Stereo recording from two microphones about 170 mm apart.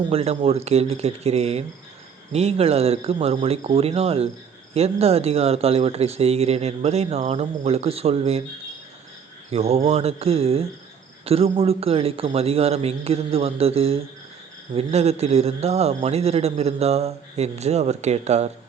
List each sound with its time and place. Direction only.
0.1 s speech: 35° right (ahead or behind)
9.5 s speech: 40° right (ahead or behind)